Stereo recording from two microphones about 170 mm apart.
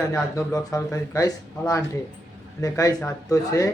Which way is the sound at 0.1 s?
15° left (ahead or behind).